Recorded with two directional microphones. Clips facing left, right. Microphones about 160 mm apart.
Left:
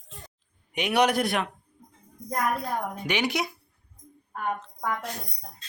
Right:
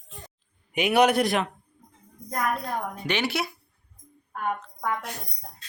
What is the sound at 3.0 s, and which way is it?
Speech, 15° left (ahead or behind).